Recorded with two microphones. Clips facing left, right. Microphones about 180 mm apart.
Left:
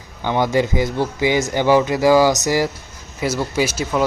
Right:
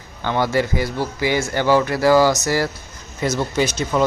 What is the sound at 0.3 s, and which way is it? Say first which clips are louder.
Speech: left 2 dB; 15° left (ahead or behind).